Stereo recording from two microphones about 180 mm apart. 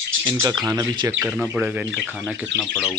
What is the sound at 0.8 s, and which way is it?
Speech, 20° right (ahead or behind).